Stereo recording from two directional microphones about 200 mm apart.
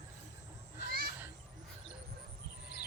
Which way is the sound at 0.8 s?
50° right (ahead or behind).